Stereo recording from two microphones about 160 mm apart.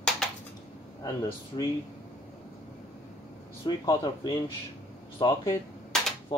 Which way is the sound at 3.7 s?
25° left (ahead or behind).